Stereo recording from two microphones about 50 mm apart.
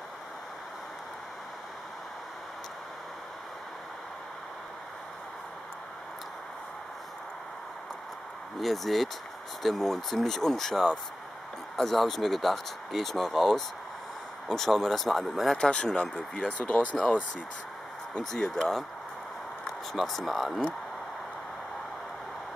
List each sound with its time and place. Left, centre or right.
8.5 s speech: centre
15.5 s speech: centre
18.3 s speech: centre
20.0 s speech: centre